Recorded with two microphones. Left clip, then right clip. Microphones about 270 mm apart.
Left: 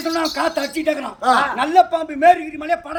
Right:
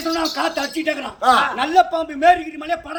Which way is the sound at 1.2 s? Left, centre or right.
Centre.